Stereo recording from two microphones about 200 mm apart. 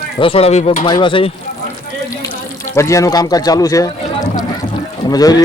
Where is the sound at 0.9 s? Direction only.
25° left (ahead or behind).